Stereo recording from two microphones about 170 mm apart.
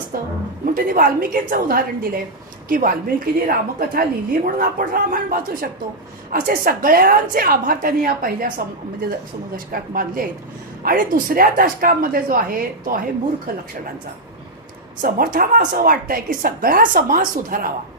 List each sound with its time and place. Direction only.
0.6 s a woman's voice: 55° right (ahead or behind)
9.7 s speech: 55° right (ahead or behind)
15.0 s speech: 55° right (ahead or behind)